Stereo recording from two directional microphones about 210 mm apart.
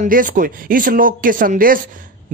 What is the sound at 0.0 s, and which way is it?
Speech, 40° right (ahead or behind).